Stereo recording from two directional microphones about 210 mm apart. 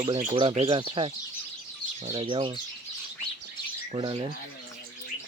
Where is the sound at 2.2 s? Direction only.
25° right (ahead or behind).